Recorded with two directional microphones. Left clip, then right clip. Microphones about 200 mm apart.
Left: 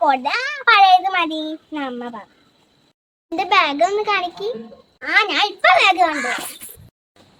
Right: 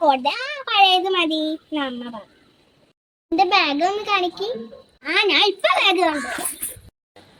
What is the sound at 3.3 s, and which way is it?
A child's voice, 20° left (ahead or behind).